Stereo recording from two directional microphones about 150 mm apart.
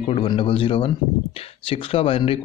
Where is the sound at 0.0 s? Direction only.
40° left (ahead or behind).